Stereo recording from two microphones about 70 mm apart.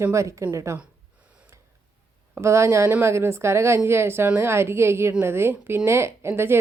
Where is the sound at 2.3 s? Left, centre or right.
Right.